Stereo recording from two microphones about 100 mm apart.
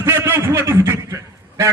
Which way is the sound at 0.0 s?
25° right (ahead or behind).